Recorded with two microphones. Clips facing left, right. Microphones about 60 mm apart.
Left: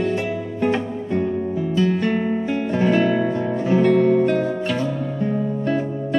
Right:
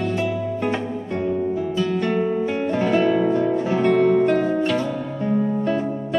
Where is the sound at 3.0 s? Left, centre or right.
Centre.